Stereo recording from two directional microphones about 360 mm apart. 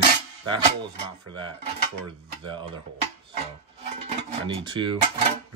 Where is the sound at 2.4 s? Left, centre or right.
Centre.